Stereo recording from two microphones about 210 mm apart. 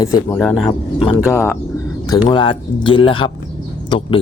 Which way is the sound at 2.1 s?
20° left (ahead or behind).